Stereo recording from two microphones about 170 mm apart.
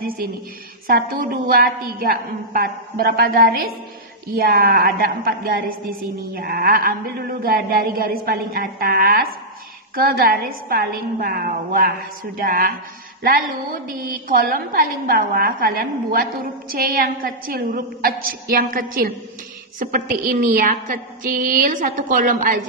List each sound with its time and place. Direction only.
0.8 s a woman's voice: 55° right (ahead or behind)